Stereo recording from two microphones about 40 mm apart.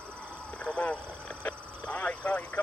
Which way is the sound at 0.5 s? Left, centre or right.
Left.